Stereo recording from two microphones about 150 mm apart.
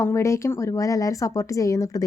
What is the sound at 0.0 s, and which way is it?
A woman's voice, 20° left (ahead or behind).